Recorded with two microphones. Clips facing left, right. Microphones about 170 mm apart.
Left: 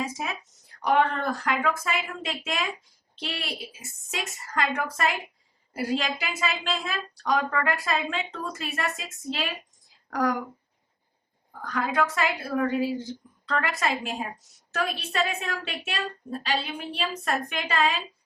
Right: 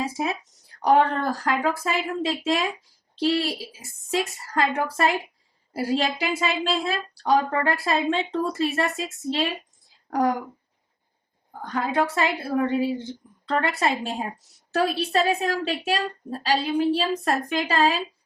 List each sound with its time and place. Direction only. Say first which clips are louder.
0.0 s a woman's voice: right 5 dB; 30° right (ahead or behind)
11.6 s a woman's voice: right 2 dB; 30° right (ahead or behind)